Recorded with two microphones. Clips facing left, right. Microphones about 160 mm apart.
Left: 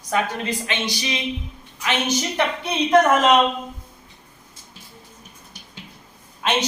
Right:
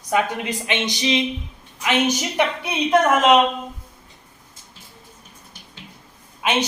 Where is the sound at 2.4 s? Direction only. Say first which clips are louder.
Right 3 dB; 10° right (ahead or behind).